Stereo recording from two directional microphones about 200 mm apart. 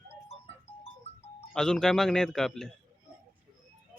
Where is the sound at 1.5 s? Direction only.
5° left (ahead or behind).